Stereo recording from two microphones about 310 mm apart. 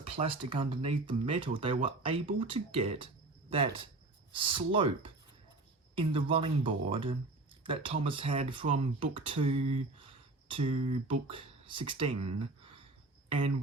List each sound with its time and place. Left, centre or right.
0.0 s speech: centre
4.3 s speech: centre